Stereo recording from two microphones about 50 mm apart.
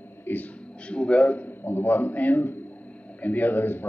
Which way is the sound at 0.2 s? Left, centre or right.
Left.